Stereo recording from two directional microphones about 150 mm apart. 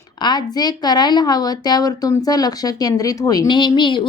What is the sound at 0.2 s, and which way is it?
A woman's voice, 30° left (ahead or behind).